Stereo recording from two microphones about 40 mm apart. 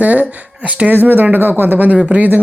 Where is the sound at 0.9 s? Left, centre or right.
Right.